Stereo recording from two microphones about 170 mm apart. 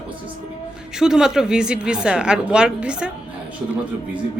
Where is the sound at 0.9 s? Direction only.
5° right (ahead or behind).